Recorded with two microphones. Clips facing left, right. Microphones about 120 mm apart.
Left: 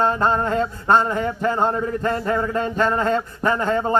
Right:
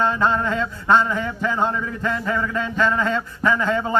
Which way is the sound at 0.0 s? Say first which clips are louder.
Left 1 dB; 45° left (ahead or behind).